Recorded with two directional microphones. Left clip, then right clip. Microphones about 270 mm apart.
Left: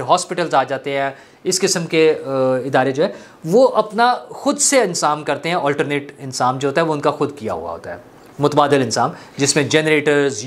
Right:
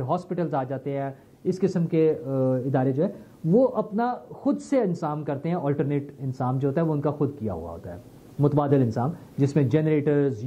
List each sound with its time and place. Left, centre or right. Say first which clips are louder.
0.0 s speech: left 11 dB; centre
7.5 s speech: left 10 dB; centre